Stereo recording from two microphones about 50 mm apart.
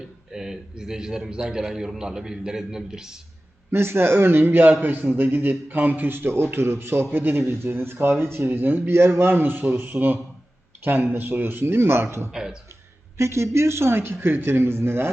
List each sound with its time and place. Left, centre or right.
0.3 s a man's voice: centre
3.7 s a man's voice: right
8.4 s a man's voice: right
8.9 s a man's voice: right
12.3 s a man's voice: centre
13.1 s a man's voice: right